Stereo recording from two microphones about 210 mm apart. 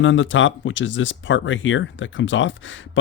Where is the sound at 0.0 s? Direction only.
65° left (ahead or behind).